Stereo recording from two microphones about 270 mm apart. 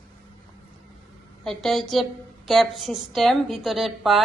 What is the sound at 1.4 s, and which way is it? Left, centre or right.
A woman's voice, centre.